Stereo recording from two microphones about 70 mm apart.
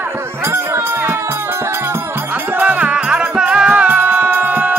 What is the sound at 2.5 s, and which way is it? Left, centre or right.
Music, right.